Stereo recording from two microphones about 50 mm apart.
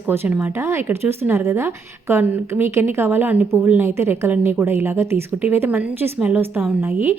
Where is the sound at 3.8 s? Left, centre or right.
Right.